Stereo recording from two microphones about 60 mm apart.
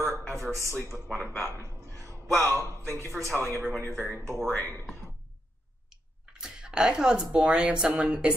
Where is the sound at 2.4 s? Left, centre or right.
Right.